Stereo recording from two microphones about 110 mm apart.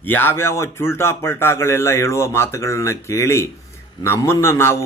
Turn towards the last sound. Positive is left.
turn(degrees=25)  # may be behind; listen again after turning